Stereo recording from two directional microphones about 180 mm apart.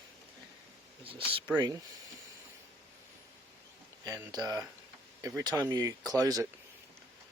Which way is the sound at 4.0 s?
20° right (ahead or behind).